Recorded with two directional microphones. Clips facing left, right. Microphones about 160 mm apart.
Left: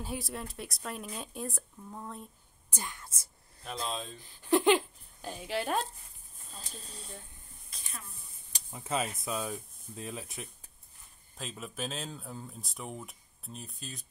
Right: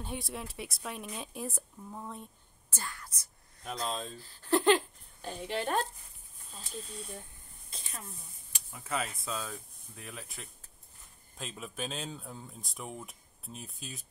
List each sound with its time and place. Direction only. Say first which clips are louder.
0.0 s speech: left 1 dB; centre (ahead or behind)
2.7 s speech: left 1 dB; 20° left (ahead or behind)
3.8 s speech: right 1 dB; centre (ahead or behind)
4.4 s a sound: left 1 dB; 10° left (ahead or behind)
6.5 s speech: right 5 dB; 35° left (ahead or behind)
7.7 s speech: right 2 dB; 30° right (ahead or behind)
8.6 s speech: left 3 dB; 25° left (ahead or behind)
11.3 s speech: even; centre (ahead or behind)